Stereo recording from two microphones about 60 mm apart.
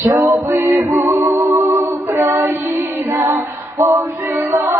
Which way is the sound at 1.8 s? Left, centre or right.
Right.